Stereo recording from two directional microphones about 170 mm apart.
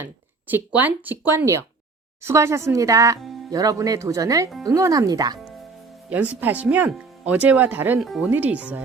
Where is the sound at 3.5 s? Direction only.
20° right (ahead or behind).